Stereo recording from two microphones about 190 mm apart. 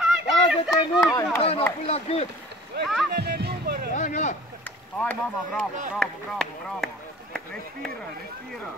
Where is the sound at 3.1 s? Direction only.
55° right (ahead or behind).